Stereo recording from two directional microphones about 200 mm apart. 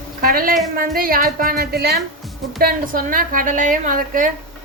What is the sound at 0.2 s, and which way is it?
A woman's voice, 45° right (ahead or behind).